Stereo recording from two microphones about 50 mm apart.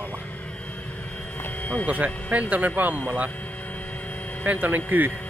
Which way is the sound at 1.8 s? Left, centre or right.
Right.